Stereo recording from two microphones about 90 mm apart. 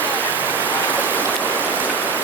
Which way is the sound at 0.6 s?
20° left (ahead or behind).